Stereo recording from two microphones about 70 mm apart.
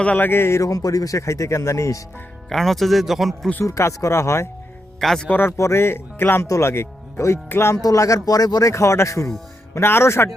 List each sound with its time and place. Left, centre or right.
0.2 s speech: left
0.6 s speech: left
2.5 s speech: centre
3.6 s speech: left
4.9 s speech: centre
5.3 s speech: left
6.4 s speech: left
7.8 s speech: left
8.6 s speech: left